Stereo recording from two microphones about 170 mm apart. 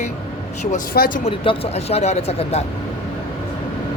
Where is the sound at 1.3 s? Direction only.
35° left (ahead or behind).